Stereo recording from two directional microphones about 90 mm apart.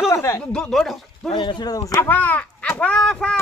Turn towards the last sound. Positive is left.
turn(degrees=10)  # may be behind; listen again after turning